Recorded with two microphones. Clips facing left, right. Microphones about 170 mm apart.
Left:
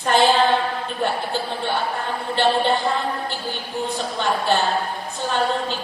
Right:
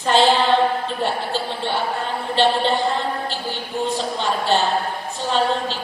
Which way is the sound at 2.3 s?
20° right (ahead or behind).